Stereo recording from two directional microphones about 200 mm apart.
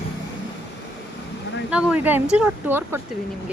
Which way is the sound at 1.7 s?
5° right (ahead or behind).